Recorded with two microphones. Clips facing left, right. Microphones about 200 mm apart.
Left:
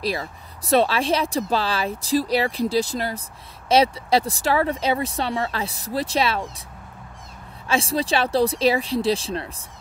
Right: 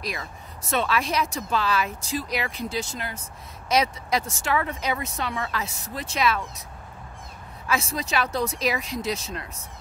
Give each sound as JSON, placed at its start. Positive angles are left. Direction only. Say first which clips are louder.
{"t": 0.0, "sound": "speech", "louder": "left 7 dB", "side_deg": 30}
{"t": 7.6, "sound": "speech", "louder": "left 5 dB", "side_deg": 30}